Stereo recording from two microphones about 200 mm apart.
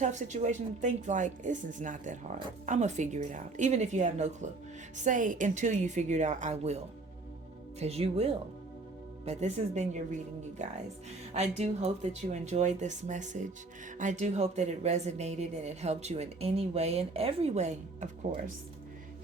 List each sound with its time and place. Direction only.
0.0 s speech: 35° right (ahead or behind)